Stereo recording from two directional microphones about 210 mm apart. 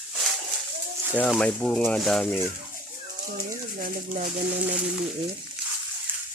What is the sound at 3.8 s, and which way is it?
Speech, 40° right (ahead or behind).